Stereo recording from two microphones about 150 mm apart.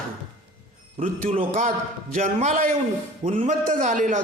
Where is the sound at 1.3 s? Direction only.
40° right (ahead or behind).